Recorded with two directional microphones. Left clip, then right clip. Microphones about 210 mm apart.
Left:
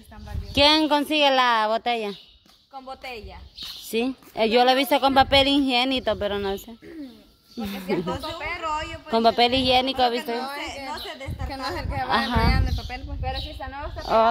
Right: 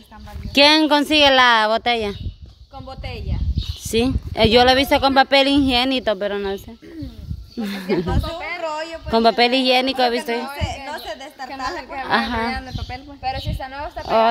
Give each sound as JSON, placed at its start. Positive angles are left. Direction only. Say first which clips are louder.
{"t": 0.6, "sound": "a woman's voice", "louder": "right 5 dB", "side_deg": -15}
{"t": 2.9, "sound": "speech", "louder": "right 2 dB", "side_deg": 20}
{"t": 3.8, "sound": "a woman's voice", "louder": "right 6 dB", "side_deg": -15}
{"t": 7.6, "sound": "a woman's voice", "louder": "right 4 dB", "side_deg": -15}
{"t": 11.4, "sound": "a woman's voice", "louder": "right 4 dB", "side_deg": 50}
{"t": 12.1, "sound": "speech", "louder": "right 3 dB", "side_deg": -5}
{"t": 12.5, "sound": "speech", "louder": "right 2 dB", "side_deg": 20}
{"t": 13.2, "sound": "a woman's voice", "louder": "right 7 dB", "side_deg": -35}
{"t": 14.0, "sound": "speech", "louder": "right 3 dB", "side_deg": -5}